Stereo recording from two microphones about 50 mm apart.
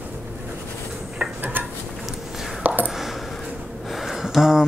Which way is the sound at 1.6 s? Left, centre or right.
Right.